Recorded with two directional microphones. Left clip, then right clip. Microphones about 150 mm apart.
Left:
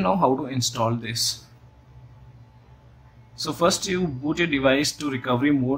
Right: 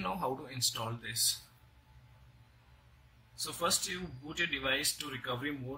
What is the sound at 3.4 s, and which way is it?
Speech, 30° left (ahead or behind).